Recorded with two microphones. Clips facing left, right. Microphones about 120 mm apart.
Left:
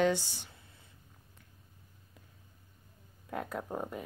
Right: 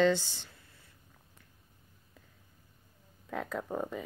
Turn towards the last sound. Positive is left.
turn(degrees=5)  # may be behind; listen again after turning